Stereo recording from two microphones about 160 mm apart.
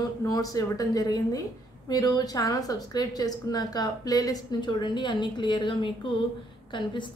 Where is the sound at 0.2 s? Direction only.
20° left (ahead or behind).